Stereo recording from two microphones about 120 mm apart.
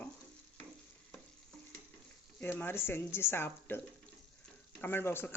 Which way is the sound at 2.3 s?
15° left (ahead or behind).